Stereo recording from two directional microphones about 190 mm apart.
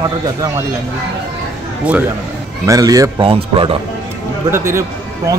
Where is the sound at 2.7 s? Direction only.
20° right (ahead or behind).